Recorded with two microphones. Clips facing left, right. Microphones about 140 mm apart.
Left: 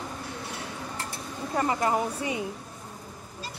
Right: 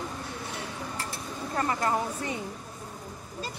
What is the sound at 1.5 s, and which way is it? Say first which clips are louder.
Speech: left 2 dB; 20° left (ahead or behind).